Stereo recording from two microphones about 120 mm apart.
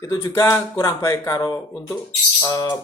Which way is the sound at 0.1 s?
25° left (ahead or behind).